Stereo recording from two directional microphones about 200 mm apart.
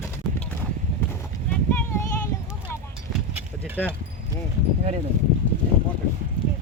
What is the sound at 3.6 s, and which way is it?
Speech, 10° right (ahead or behind).